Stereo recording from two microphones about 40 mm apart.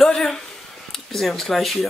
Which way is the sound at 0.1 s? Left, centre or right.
Centre.